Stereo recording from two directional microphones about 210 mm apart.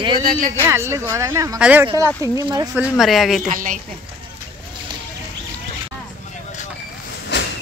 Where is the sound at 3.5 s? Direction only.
35° right (ahead or behind).